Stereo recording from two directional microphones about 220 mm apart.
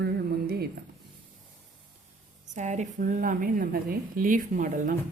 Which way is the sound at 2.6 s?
30° right (ahead or behind).